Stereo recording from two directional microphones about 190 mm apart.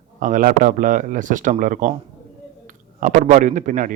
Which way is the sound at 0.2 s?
45° right (ahead or behind).